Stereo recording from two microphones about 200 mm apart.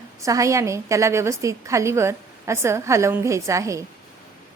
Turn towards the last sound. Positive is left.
turn(degrees=-15)  # may be behind; listen again after turning